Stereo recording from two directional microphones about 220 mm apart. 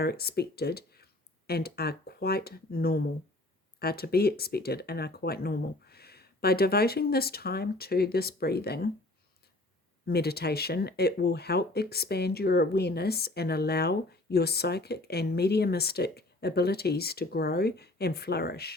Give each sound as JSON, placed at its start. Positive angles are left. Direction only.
{"t": 0.0, "sound": "speech", "side_deg": 45}
{"t": 10.1, "sound": "speech", "side_deg": 45}